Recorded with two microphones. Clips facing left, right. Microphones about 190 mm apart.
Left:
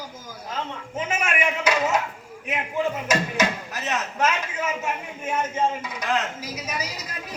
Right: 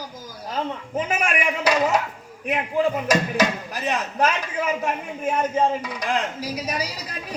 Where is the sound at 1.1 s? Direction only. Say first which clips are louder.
Even; 35° right (ahead or behind).